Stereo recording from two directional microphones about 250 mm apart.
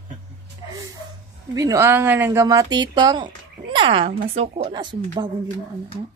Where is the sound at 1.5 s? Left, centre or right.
Centre.